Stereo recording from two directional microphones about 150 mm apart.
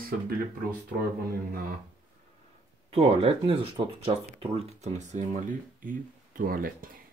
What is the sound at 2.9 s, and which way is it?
Speech, 40° right (ahead or behind).